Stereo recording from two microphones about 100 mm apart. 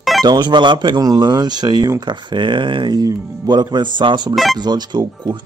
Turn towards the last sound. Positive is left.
turn(degrees=-45)  # may be behind; listen again after turning